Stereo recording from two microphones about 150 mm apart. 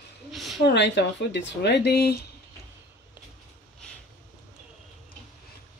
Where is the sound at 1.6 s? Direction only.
90° left.